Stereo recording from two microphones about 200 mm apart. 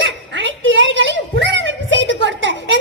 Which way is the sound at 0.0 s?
65° right (ahead or behind).